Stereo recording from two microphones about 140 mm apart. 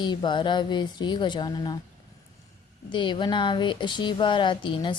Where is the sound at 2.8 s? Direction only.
35° left (ahead or behind).